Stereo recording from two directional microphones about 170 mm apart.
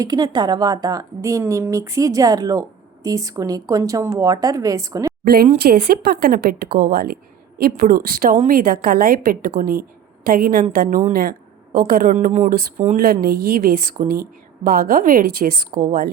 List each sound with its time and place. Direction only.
0.0 s a woman's voice: 25° right (ahead or behind)
5.2 s a woman's voice: 65° right (ahead or behind)